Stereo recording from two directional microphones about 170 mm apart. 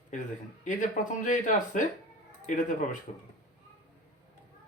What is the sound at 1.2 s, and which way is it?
Speech, 50° left (ahead or behind).